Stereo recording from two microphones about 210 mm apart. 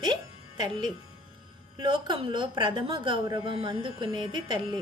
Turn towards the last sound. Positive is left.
turn(degrees=-20)  # may be behind; listen again after turning